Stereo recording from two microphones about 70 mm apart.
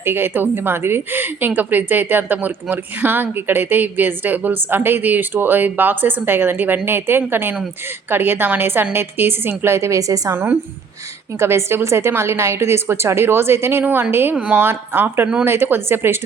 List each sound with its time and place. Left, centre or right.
0.0 s a woman's voice: right
10.0 s a woman's voice: right
10.3 s a woman's voice: right
14.3 s a woman's voice: centre
14.6 s a woman's voice: right